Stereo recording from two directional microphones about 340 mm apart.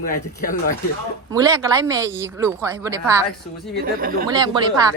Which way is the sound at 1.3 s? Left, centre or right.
Centre.